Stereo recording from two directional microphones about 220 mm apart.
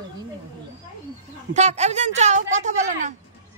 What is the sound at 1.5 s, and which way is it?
A woman's voice, 30° right (ahead or behind).